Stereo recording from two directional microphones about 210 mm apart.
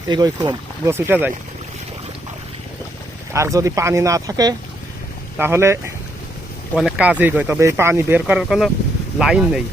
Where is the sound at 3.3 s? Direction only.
15° right (ahead or behind).